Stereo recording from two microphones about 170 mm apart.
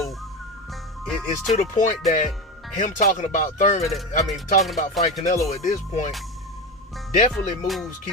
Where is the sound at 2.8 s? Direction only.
50° left (ahead or behind).